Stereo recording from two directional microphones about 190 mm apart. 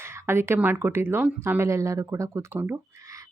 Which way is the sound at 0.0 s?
15° right (ahead or behind).